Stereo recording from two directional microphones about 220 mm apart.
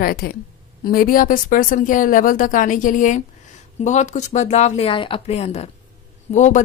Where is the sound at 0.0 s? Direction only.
45° left (ahead or behind).